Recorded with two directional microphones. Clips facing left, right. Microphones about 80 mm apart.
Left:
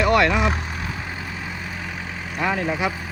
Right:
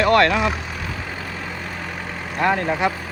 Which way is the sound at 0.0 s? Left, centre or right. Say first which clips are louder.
Right 2 dB; centre.